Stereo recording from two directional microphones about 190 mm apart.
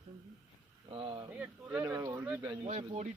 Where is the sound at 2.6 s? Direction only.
30° right (ahead or behind).